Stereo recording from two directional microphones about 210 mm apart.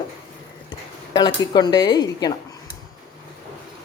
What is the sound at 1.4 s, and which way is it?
Speech, 20° left (ahead or behind).